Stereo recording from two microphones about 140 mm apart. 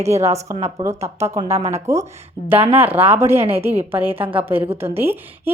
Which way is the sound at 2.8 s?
15° right (ahead or behind).